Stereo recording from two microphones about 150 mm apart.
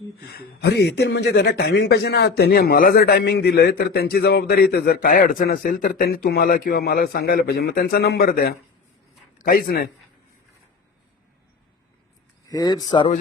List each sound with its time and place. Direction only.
0.3 s a man's voice: 90° left
9.4 s a man's voice: 75° left (ahead or behind)
12.5 s speech: 25° left (ahead or behind)